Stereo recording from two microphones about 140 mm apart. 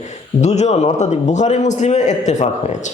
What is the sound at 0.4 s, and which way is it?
Speech, 55° left (ahead or behind).